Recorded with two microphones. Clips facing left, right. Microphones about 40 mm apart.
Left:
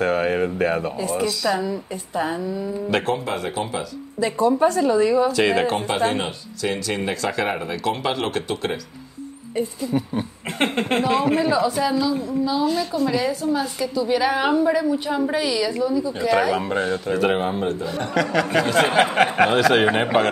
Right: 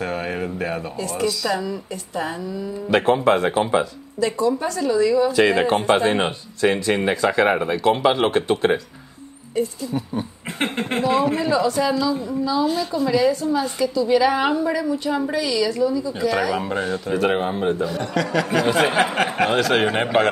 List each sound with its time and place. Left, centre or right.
0.0 s speech: centre
0.9 s a woman's voice: centre
1.2 s a man's voice: centre
1.6 s a woman's voice: left
2.9 s speech: centre
3.3 s speech: right
4.4 s speech: left
5.4 s a man's voice: centre
5.8 s speech: right
6.9 s speech: centre
9.9 s speech: centre
12.6 s a man's voice: centre
19.1 s a man's voice: centre